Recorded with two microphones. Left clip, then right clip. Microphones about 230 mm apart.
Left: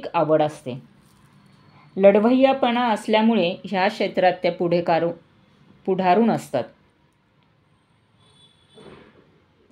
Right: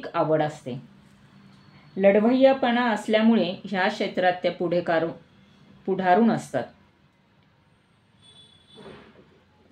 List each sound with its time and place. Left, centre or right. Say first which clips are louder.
0.0 s speech: left 4 dB; left
2.0 s speech: left 4 dB; left